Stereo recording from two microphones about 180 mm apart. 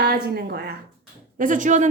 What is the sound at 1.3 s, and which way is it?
Speech, 45° right (ahead or behind).